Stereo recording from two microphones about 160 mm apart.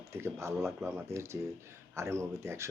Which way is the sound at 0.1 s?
15° right (ahead or behind).